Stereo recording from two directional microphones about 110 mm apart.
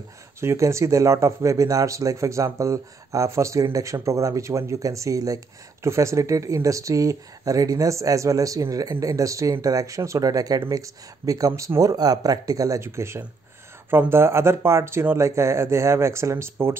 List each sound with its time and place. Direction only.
0.4 s speech: 25° right (ahead or behind)